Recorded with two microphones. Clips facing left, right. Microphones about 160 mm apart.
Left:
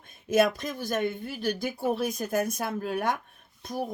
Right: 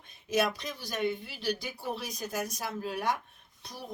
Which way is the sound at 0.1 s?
50° left (ahead or behind).